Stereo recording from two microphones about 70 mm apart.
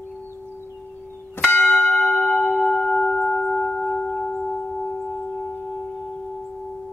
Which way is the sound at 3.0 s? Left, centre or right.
Left.